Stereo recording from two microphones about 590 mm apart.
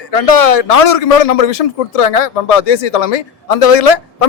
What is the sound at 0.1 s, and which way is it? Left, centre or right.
A man's voice, left.